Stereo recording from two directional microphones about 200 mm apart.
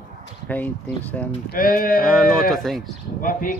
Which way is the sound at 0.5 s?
5° left (ahead or behind).